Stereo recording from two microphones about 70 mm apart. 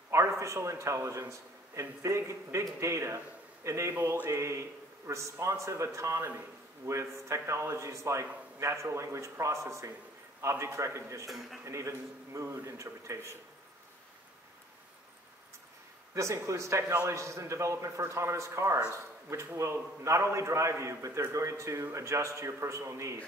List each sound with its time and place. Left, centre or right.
0.1 s a man's voice: right
11.2 s a man's voice: centre
11.6 s a man's voice: right
16.2 s a man's voice: right